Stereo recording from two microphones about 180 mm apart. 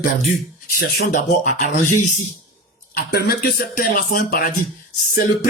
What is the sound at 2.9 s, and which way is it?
Speech, 60° left (ahead or behind).